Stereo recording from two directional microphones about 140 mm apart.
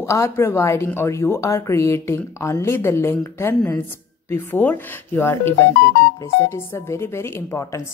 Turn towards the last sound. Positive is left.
turn(degrees=20)  # may be behind; listen again after turning